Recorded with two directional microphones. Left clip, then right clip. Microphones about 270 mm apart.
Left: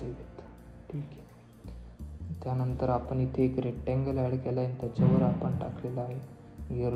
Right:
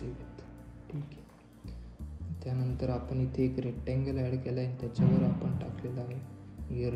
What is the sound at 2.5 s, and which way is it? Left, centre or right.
Speech, left.